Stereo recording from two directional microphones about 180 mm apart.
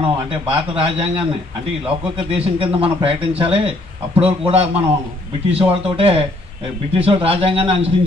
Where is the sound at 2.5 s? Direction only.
30° right (ahead or behind).